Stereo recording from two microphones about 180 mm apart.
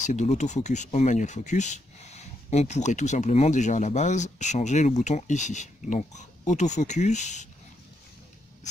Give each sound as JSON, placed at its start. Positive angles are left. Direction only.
{"t": 0.0, "sound": "speech", "side_deg": 40}